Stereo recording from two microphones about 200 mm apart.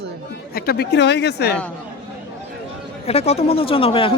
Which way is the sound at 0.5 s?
50° left (ahead or behind).